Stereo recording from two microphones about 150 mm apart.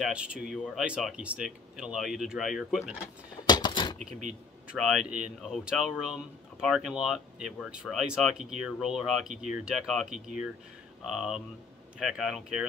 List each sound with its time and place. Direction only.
0.0 s speech: 5° right (ahead or behind)
3.4 s a sound: 30° left (ahead or behind)
4.6 s speech: 5° right (ahead or behind)
11.1 s speech: centre (ahead or behind)